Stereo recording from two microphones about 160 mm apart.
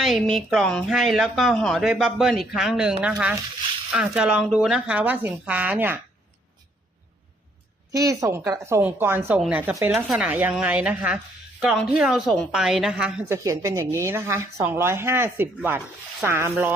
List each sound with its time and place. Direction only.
0.0 s a woman's voice: centre (ahead or behind)
7.9 s a woman's voice: 20° right (ahead or behind); by 13.2 s 5° right (ahead or behind)
13.2 s a woman's voice: 20° right (ahead or behind)